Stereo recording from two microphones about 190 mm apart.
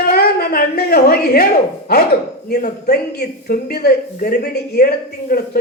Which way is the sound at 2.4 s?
55° left (ahead or behind).